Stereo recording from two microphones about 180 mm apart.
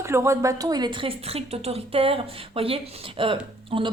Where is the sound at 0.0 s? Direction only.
15° right (ahead or behind).